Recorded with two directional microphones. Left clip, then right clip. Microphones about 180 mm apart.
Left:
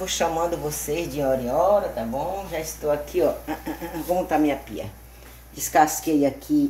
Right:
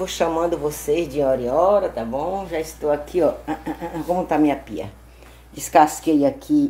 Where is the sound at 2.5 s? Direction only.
20° right (ahead or behind).